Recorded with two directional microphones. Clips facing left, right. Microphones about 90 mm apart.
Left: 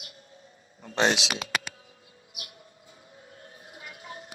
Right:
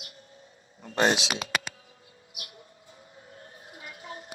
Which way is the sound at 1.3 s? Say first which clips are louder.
Right 1 dB; 30° right (ahead or behind).